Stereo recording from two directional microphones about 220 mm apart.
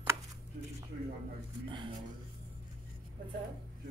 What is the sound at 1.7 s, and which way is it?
Speech, 20° right (ahead or behind).